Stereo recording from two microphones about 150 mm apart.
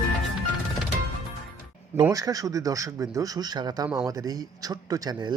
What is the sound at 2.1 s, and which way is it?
Speech, 25° right (ahead or behind).